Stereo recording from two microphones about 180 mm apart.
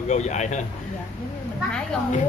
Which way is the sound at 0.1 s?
40° left (ahead or behind).